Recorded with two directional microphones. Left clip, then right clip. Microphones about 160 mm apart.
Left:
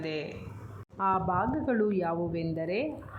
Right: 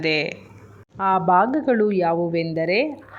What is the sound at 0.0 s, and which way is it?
A woman's voice, 25° right (ahead or behind).